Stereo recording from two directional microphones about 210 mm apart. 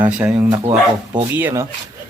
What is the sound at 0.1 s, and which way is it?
Speech, 5° right (ahead or behind).